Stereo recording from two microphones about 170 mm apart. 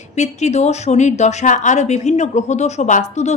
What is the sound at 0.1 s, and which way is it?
A woman's voice, 40° left (ahead or behind).